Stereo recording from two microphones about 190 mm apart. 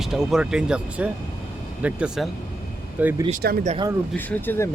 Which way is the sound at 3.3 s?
50° right (ahead or behind).